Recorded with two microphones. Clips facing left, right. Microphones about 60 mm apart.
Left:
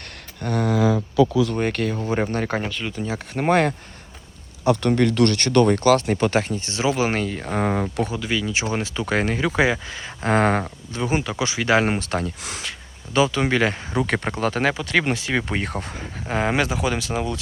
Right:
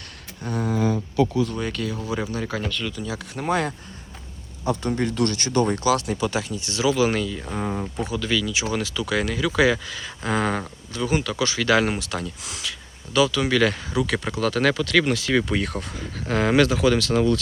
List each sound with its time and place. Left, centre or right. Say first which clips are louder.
0.4 s speech: left 3 dB; left
4.6 s speech: left 5 dB; left
5.7 s speech: left 4 dB; left
7.3 s speech: left 5 dB; left
8.2 s speech: even; left
10.9 s speech: even; left
13.1 s speech: even; left